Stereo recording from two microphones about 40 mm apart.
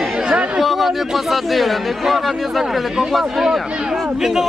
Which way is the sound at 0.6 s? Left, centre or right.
Centre.